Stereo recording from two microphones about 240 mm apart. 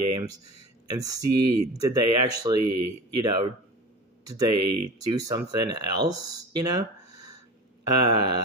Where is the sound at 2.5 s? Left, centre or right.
Right.